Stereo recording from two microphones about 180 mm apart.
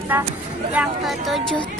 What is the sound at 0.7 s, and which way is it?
Speech, 5° right (ahead or behind).